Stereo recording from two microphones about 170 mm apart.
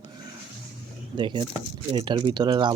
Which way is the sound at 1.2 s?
30° right (ahead or behind).